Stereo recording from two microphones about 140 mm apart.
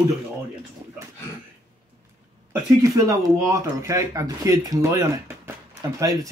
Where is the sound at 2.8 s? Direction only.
25° right (ahead or behind).